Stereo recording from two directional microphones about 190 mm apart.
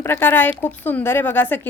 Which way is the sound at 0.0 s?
10° left (ahead or behind).